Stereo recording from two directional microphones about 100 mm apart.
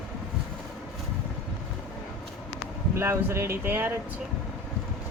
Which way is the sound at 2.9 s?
25° right (ahead or behind).